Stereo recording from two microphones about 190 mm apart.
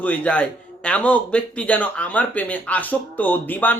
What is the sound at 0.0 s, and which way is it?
Speech, 10° left (ahead or behind).